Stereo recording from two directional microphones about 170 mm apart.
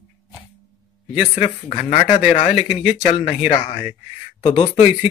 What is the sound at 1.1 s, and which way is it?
Speech, 5° right (ahead or behind).